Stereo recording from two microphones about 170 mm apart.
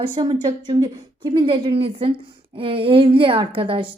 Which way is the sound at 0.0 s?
25° right (ahead or behind).